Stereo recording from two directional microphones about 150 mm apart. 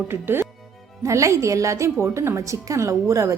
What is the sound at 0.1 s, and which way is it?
A woman's voice, 15° right (ahead or behind).